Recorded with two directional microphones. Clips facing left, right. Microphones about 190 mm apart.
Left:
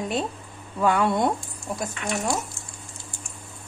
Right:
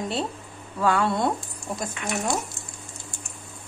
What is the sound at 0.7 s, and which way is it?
Speech, 20° left (ahead or behind).